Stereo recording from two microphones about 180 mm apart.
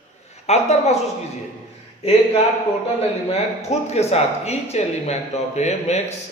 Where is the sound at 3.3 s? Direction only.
35° left (ahead or behind).